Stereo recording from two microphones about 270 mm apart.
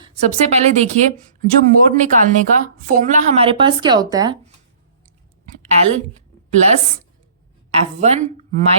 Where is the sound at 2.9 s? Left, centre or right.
Right.